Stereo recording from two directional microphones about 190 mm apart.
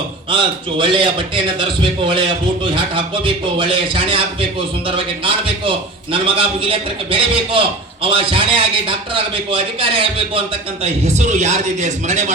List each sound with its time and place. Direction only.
0.3 s a man's voice: 25° right (ahead or behind)